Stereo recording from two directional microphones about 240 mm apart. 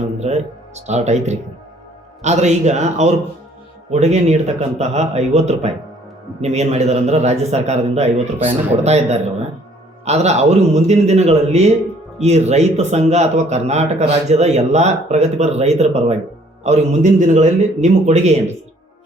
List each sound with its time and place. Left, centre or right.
0.2 s speech: right